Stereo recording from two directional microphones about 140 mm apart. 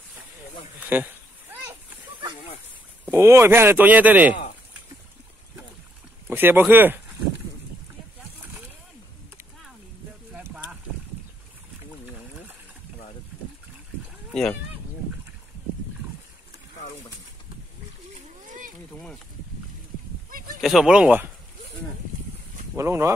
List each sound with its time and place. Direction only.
0.7 s children playing: 15° right (ahead or behind)
3.1 s speech: 20° right (ahead or behind)
6.2 s speech: 15° right (ahead or behind)
10.3 s a sound: 10° right (ahead or behind)
20.2 s a sound: 85° right
20.6 s speech: 5° right (ahead or behind)
22.8 s speech: 20° right (ahead or behind)